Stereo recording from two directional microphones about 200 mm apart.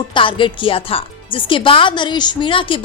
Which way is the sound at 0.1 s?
25° left (ahead or behind).